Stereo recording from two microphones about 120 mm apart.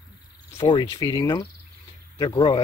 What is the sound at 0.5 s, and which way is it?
Cricket, 40° left (ahead or behind).